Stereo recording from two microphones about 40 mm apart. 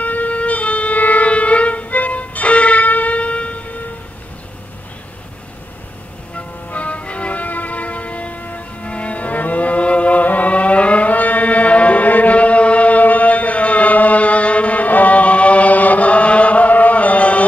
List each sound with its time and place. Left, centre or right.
0.0 s music: left
6.3 s music: left